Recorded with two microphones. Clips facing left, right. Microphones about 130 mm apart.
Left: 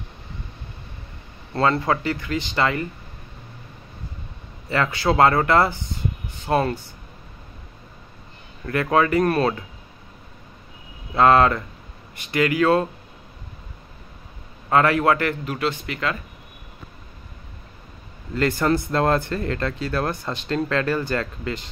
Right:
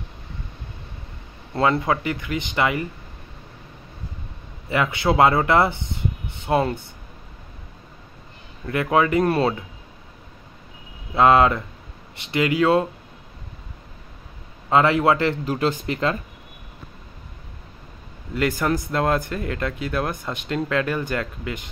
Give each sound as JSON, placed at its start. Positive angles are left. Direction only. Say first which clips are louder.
{"t": 1.5, "sound": "speech", "louder": "even", "side_deg": -15}
{"t": 4.6, "sound": "a man's voice", "louder": "even", "side_deg": -15}
{"t": 8.6, "sound": "speech", "louder": "even", "side_deg": -10}
{"t": 11.1, "sound": "a man's voice", "louder": "even", "side_deg": -20}
{"t": 14.7, "sound": "a man's voice", "louder": "right 1 dB", "side_deg": -20}
{"t": 15.4, "sound": "speech", "louder": "right 3 dB", "side_deg": -35}
{"t": 18.3, "sound": "speech", "louder": "left 2 dB", "side_deg": -10}